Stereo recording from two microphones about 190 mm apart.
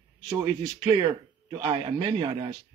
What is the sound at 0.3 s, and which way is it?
A man's voice, 20° right (ahead or behind).